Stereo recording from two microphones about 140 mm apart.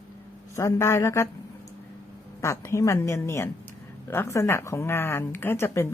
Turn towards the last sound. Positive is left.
turn(degrees=15)  # may be behind; listen again after turning